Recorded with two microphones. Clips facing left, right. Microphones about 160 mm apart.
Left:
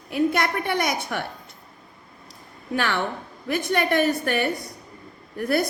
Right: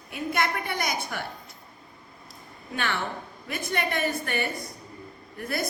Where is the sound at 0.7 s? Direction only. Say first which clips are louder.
Left 6 dB; 65° left (ahead or behind).